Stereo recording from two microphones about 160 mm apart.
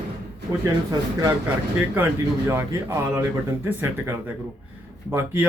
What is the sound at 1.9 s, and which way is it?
Speech, 15° right (ahead or behind).